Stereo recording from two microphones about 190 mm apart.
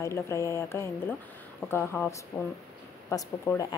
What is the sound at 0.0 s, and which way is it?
A woman's voice, 15° left (ahead or behind).